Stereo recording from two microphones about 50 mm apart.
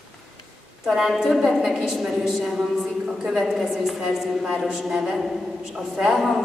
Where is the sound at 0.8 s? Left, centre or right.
Centre.